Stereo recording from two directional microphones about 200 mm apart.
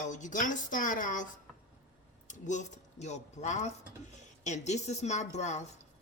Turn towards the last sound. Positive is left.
turn(degrees=35)  # may be behind; listen again after turning